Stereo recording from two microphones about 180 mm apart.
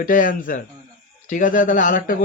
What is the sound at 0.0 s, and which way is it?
Speech, 50° left (ahead or behind).